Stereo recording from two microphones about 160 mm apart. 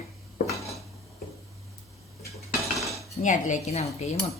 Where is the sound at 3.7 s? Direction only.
45° left (ahead or behind).